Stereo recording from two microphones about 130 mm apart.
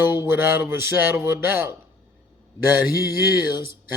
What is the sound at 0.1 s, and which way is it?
A man's voice, 15° right (ahead or behind).